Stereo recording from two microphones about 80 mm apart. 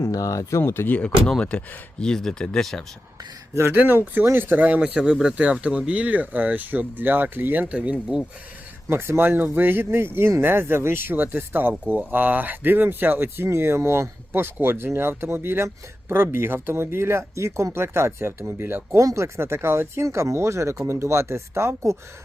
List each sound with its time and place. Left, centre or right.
0.1 s speech: left
0.6 s speech: left
1.4 s speech: centre
3.8 s speech: right
8.9 s speech: right